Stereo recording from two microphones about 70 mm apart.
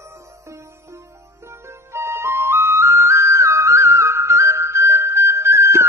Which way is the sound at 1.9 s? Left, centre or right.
Right.